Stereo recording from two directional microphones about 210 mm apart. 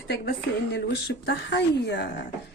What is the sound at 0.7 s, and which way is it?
Speech, 60° left (ahead or behind).